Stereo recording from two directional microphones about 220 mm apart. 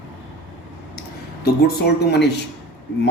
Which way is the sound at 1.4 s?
50° left (ahead or behind).